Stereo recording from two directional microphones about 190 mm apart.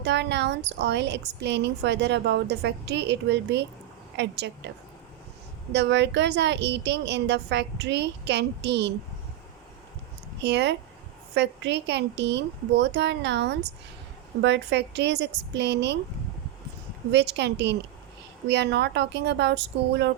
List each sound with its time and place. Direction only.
0.0 s a woman's voice: 65° right (ahead or behind)
5.7 s a woman's voice: 65° right (ahead or behind)
10.4 s a woman's voice: 65° right (ahead or behind)
17.1 s a woman's voice: 65° right (ahead or behind)